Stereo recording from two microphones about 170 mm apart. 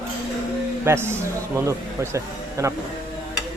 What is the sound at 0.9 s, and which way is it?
A man's voice, 15° right (ahead or behind).